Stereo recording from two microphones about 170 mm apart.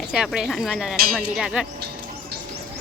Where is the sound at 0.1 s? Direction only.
5° right (ahead or behind).